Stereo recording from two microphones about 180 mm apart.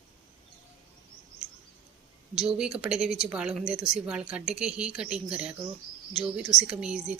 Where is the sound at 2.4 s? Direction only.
5° right (ahead or behind).